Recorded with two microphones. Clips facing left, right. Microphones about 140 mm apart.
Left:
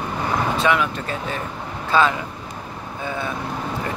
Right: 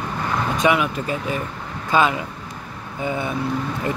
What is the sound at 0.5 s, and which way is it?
Speech, 10° right (ahead or behind).